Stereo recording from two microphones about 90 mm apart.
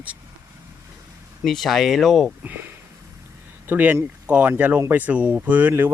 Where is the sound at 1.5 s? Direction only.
5° left (ahead or behind).